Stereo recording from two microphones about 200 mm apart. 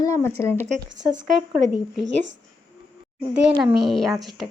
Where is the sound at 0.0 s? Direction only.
15° left (ahead or behind).